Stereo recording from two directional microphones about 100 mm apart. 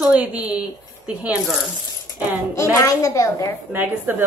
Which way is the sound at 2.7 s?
35° left (ahead or behind).